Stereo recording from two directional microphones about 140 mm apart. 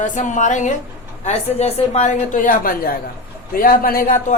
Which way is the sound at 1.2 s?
50° left (ahead or behind).